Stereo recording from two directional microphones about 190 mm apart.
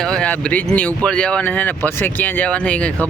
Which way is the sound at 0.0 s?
5° left (ahead or behind).